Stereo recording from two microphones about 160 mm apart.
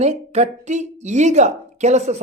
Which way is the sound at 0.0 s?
45° right (ahead or behind).